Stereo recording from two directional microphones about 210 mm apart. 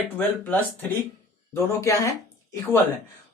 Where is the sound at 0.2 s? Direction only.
10° left (ahead or behind).